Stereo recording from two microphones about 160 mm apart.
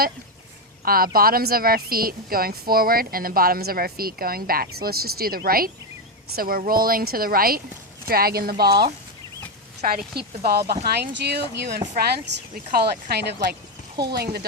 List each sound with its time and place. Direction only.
0.9 s a woman's voice: 65° right (ahead or behind)
9.8 s a woman's voice: 60° right (ahead or behind)
10.2 s speech: 75° right (ahead or behind)
11.9 s speech: 70° right (ahead or behind); by 14.4 s 90° right